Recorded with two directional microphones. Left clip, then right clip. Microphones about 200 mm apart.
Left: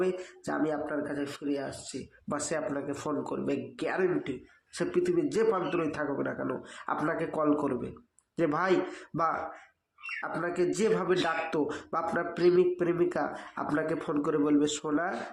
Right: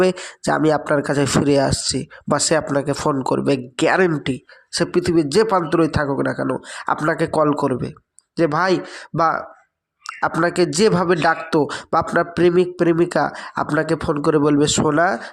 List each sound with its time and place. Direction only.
0.0 s speech: 45° right (ahead or behind)
10.2 s speech: 45° right (ahead or behind)